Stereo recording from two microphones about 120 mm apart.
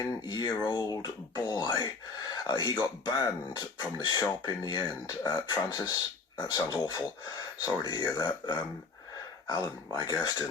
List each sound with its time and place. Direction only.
0.0 s speech: 35° left (ahead or behind)